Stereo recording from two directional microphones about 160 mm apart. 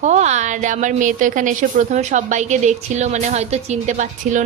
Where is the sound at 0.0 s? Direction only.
45° right (ahead or behind).